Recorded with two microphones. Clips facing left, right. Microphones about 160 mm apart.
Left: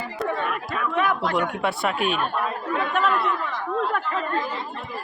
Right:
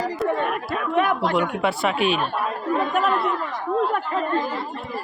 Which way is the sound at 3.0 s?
40° right (ahead or behind).